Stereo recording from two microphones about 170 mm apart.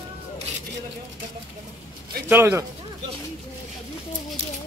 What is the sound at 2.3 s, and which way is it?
Speech, 15° right (ahead or behind).